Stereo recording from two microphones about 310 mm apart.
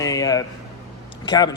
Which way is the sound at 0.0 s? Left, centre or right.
Centre.